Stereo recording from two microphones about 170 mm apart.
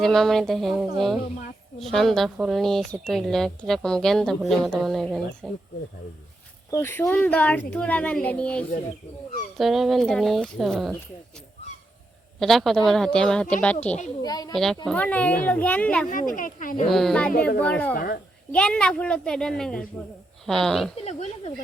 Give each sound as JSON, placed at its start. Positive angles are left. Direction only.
{"t": 0.0, "sound": "speech", "side_deg": 0}
{"t": 6.7, "sound": "a child's voice", "side_deg": 15}
{"t": 12.4, "sound": "speech", "side_deg": 0}
{"t": 14.2, "sound": "speech", "side_deg": 20}
{"t": 14.5, "sound": "a child's voice", "side_deg": 0}
{"t": 16.0, "sound": "speech", "side_deg": 55}
{"t": 16.9, "sound": "a child's voice", "side_deg": 0}
{"t": 17.9, "sound": "a woman's voice", "side_deg": 60}
{"t": 18.5, "sound": "speech", "side_deg": 5}
{"t": 21.0, "sound": "speech", "side_deg": 40}